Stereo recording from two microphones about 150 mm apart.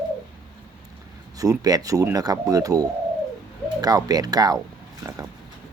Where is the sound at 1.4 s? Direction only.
25° right (ahead or behind).